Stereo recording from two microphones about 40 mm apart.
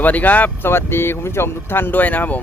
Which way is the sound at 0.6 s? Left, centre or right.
Left.